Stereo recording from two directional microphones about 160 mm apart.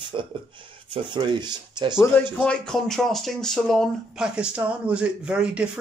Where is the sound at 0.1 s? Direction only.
30° right (ahead or behind).